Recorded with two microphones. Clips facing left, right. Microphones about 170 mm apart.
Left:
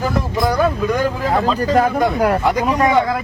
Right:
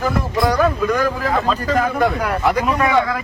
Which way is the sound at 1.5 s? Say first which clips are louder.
Left 3 dB; 35° left (ahead or behind).